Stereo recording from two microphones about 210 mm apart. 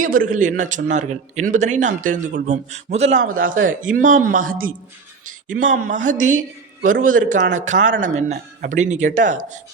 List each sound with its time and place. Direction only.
0.0 s a man's voice: 40° right (ahead or behind)